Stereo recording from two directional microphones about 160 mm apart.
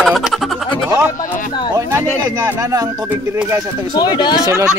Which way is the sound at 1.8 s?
15° right (ahead or behind).